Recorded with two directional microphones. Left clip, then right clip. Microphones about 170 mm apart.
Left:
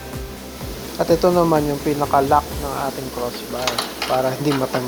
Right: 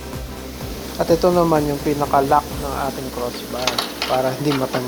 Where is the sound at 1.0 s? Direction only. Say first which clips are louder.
Even; centre (ahead or behind).